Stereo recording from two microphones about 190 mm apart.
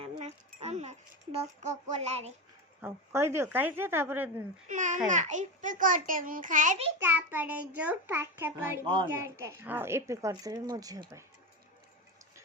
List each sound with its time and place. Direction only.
0.0 s a sound: 35° right (ahead or behind)
1.6 s a child's voice: 40° right (ahead or behind)
2.8 s a woman's voice: 15° right (ahead or behind)
4.7 s a child's voice: 40° right (ahead or behind)
7.0 s a woman's voice: 10° right (ahead or behind)